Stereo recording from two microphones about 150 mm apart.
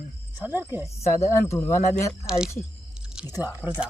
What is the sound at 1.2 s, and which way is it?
Speech, 15° left (ahead or behind).